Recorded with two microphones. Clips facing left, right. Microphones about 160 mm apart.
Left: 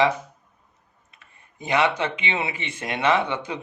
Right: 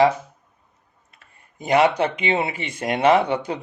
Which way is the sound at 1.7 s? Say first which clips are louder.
Right 5 dB; 40° right (ahead or behind).